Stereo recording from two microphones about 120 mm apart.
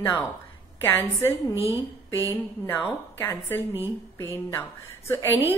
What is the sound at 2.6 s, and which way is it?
A woman's voice, 20° left (ahead or behind).